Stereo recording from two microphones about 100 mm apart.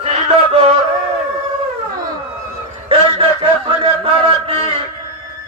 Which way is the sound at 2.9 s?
60° right (ahead or behind).